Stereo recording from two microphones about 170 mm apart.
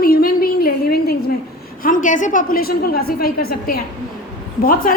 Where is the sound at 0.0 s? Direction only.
60° left (ahead or behind).